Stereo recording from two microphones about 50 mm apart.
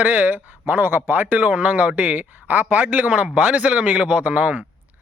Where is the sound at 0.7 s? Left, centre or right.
Right.